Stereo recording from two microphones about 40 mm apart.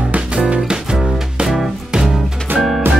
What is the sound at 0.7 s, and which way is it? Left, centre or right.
Music, centre.